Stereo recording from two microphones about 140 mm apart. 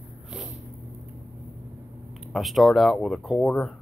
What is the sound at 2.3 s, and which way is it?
Speech, centre (ahead or behind).